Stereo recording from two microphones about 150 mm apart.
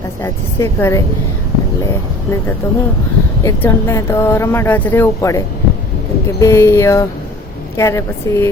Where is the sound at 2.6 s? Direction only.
20° left (ahead or behind).